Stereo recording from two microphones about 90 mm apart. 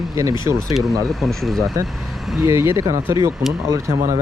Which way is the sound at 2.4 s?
30° right (ahead or behind).